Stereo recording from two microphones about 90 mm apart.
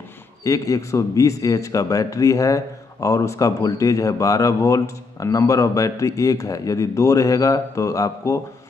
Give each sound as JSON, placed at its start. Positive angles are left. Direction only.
{"t": 0.4, "sound": "a man's voice", "side_deg": 40}